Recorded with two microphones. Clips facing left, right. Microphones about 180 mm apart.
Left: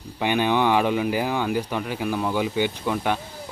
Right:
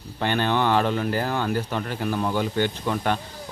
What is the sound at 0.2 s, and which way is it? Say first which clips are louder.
Speech: left 2 dB; 10° left (ahead or behind).